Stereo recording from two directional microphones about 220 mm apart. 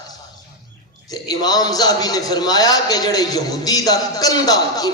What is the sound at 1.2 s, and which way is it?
A man's voice, 20° left (ahead or behind).